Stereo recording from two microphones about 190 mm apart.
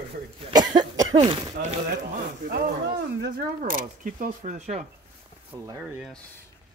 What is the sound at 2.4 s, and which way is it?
Speech, 55° right (ahead or behind).